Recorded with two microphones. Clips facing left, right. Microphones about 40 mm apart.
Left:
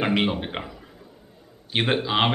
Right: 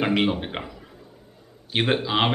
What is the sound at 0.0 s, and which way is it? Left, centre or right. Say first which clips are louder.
A man's voice: right 1 dB; centre.